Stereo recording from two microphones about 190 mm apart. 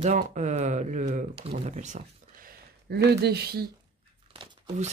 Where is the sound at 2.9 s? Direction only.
60° right (ahead or behind).